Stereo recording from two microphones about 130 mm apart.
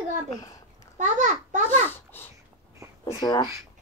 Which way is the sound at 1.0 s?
70° right (ahead or behind).